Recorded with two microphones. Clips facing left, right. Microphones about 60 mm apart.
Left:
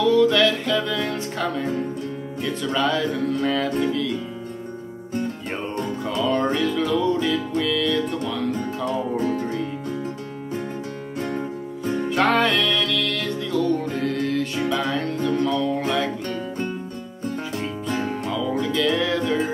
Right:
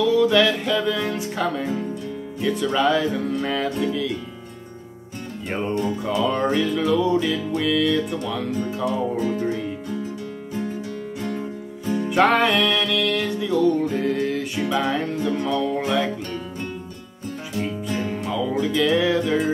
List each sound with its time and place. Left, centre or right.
0.1 s music: centre
6.0 s music: centre
11.9 s music: centre
17.6 s music: left
18.3 s music: centre